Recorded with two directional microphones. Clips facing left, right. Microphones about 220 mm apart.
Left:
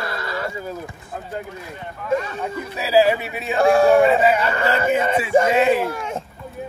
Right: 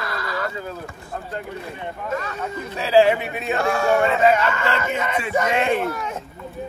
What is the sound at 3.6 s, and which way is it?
Speech, 30° left (ahead or behind).